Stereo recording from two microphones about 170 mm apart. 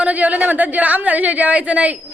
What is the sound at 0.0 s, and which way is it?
A woman's voice, 10° right (ahead or behind).